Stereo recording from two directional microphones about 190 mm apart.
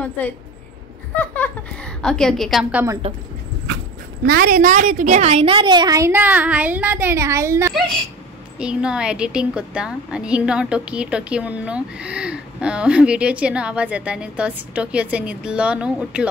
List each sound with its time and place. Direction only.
1.1 s a sound: 10° left (ahead or behind)
2.0 s a woman's voice: 5° left (ahead or behind)
3.0 s a woman's voice: 35° right (ahead or behind)
4.3 s a woman's voice: 50° right (ahead or behind); by 16.3 s 5° right (ahead or behind)